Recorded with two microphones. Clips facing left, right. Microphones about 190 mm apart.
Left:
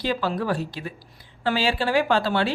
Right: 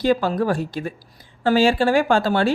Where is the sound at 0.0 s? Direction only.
45° right (ahead or behind).